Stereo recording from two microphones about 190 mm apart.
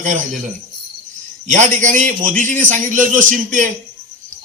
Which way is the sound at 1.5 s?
40° right (ahead or behind).